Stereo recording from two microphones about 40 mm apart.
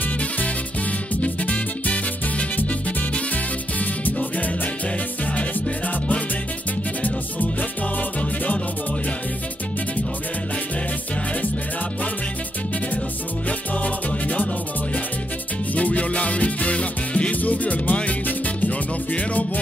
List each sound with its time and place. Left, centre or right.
1.2 s music: left
3.8 s music: left
13.5 s music: left
15.7 s music: left